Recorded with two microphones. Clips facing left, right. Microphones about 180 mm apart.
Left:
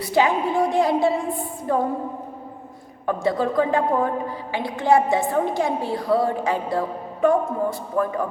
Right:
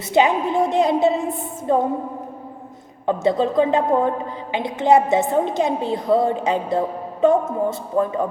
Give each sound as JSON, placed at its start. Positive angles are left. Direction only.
{"t": 0.0, "sound": "a woman's voice", "side_deg": -20}
{"t": 3.1, "sound": "a woman's voice", "side_deg": -20}